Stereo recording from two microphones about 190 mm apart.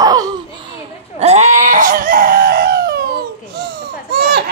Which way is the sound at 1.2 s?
35° right (ahead or behind).